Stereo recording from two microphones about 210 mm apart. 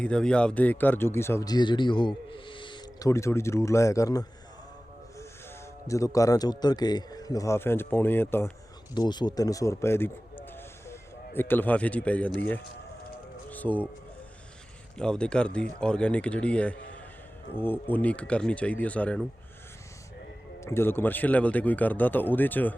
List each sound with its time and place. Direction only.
0.0 s speech: 5° left (ahead or behind)
5.9 s speech: 15° left (ahead or behind)
13.5 s a sound: 5° left (ahead or behind)
14.9 s a man's voice: 5° left (ahead or behind)
20.6 s speech: 10° left (ahead or behind)